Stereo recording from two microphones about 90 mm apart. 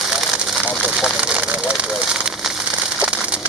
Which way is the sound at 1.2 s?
15° right (ahead or behind).